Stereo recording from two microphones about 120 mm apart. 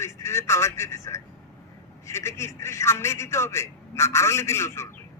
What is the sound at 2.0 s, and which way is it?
A man's voice, 25° left (ahead or behind).